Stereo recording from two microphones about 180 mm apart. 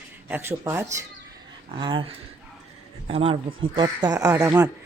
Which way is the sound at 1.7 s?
25° right (ahead or behind).